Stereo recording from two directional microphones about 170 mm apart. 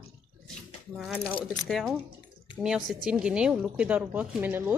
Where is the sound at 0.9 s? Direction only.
Centre (ahead or behind).